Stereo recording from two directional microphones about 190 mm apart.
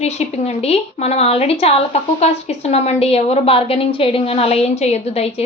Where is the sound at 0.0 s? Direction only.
35° left (ahead or behind).